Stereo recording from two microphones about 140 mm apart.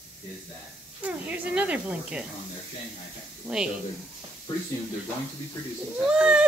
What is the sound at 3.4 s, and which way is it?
Speech, 5° right (ahead or behind).